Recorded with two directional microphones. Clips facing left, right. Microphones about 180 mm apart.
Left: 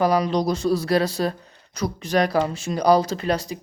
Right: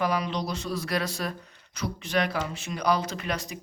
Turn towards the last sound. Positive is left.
turn(degrees=30)  # may be behind; listen again after turning